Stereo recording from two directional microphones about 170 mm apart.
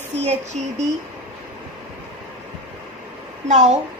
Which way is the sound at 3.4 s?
45° right (ahead or behind).